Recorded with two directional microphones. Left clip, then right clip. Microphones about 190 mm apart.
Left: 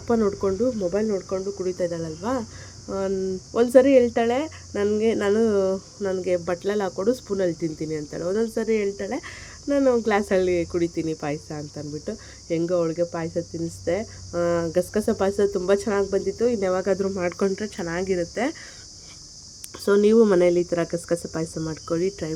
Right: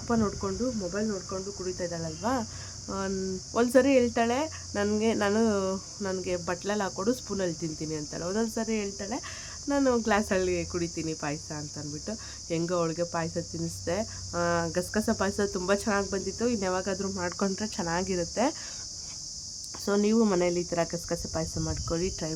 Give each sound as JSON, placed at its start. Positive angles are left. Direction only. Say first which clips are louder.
{"t": 0.1, "sound": "speech", "louder": "left 8 dB", "side_deg": 15}
{"t": 19.8, "sound": "speech", "louder": "left 9 dB", "side_deg": 10}